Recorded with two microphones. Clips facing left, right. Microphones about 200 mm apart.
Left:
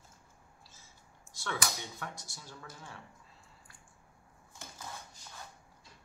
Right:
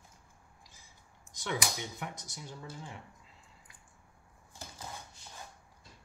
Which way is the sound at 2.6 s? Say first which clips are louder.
Right 5 dB; 30° right (ahead or behind).